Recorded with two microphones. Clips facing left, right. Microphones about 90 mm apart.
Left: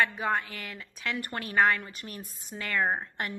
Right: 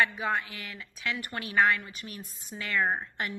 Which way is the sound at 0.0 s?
40° left (ahead or behind).